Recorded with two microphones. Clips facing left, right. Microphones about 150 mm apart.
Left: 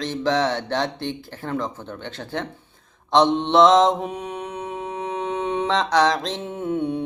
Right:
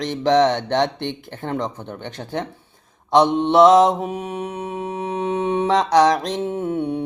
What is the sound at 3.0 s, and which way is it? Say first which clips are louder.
Mantra: right 2 dB; 10° right (ahead or behind).